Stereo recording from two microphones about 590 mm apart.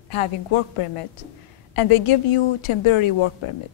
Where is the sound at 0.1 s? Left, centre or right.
Left.